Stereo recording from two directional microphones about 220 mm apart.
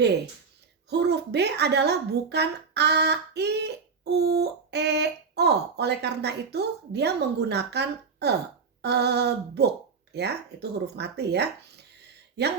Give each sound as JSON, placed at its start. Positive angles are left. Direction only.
{"t": 0.9, "sound": "a woman's voice", "side_deg": -50}